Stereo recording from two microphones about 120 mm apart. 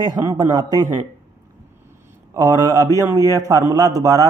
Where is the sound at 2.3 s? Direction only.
30° right (ahead or behind).